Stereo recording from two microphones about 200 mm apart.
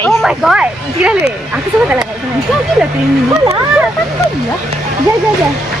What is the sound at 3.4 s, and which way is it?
Speech, 20° right (ahead or behind).